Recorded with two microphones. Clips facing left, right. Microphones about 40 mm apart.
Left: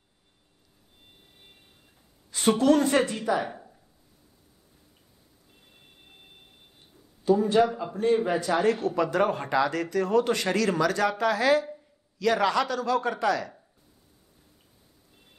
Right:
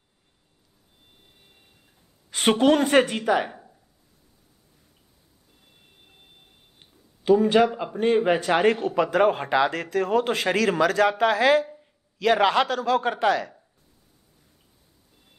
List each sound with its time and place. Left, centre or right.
2.3 s a woman's voice: right
7.4 s a woman's voice: right